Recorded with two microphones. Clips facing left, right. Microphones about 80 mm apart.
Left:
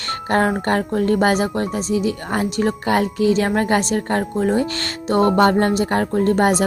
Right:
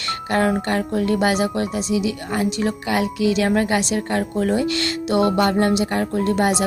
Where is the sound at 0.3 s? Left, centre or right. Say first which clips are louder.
Left 2 dB; left.